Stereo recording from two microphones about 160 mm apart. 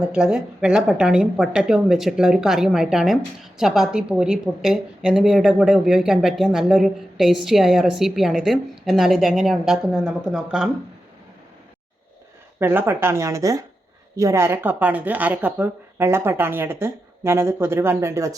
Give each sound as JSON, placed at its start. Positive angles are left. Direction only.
{"t": 0.0, "sound": "a woman's voice", "side_deg": -5}
{"t": 12.5, "sound": "speech", "side_deg": -15}